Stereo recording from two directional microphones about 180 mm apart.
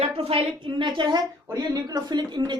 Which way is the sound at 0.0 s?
30° right (ahead or behind).